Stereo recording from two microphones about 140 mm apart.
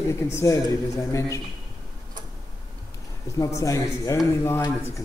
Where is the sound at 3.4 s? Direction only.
25° left (ahead or behind).